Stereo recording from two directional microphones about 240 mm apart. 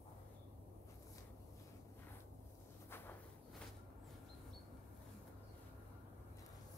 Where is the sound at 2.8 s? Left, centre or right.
Centre.